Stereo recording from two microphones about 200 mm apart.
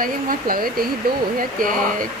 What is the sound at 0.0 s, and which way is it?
Speech, 45° right (ahead or behind).